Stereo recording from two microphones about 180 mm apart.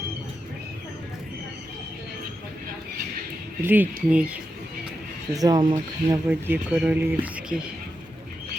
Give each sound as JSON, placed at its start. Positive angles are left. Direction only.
{"t": 3.6, "sound": "speech", "side_deg": -10}
{"t": 5.3, "sound": "speech", "side_deg": -20}
{"t": 6.2, "sound": "speech", "side_deg": -10}